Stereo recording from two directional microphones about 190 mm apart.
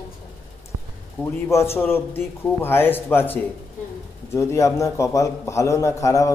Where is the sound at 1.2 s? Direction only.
15° left (ahead or behind).